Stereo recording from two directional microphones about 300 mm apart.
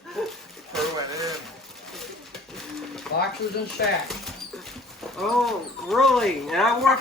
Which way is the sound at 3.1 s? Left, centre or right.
Centre.